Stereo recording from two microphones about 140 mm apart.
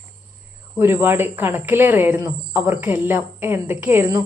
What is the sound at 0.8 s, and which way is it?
Speech, 15° right (ahead or behind).